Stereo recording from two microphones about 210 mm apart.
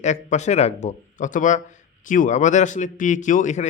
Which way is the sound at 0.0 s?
35° left (ahead or behind).